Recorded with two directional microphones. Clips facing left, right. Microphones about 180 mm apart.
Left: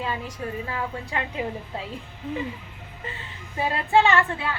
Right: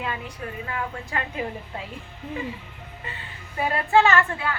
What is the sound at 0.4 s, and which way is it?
Speech, 30° left (ahead or behind).